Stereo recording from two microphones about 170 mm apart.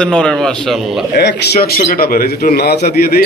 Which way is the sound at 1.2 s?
65° left (ahead or behind).